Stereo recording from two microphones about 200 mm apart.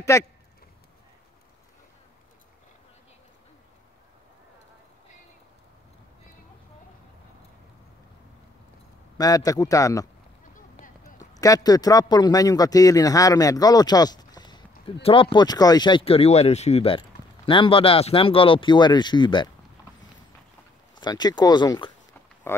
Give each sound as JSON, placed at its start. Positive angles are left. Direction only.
{"t": 0.1, "sound": "speech", "side_deg": 15}
{"t": 9.2, "sound": "speech", "side_deg": 20}
{"t": 11.1, "sound": "a man's voice", "side_deg": 15}
{"t": 21.0, "sound": "a man's voice", "side_deg": 20}
{"t": 22.5, "sound": "speech", "side_deg": 10}